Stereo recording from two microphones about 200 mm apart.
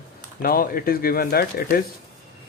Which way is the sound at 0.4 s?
45° left (ahead or behind).